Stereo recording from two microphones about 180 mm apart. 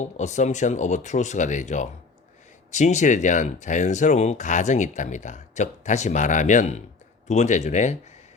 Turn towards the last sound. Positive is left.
turn(degrees=40)  # may be behind; listen again after turning